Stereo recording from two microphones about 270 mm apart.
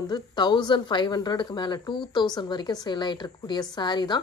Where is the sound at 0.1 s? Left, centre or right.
Centre.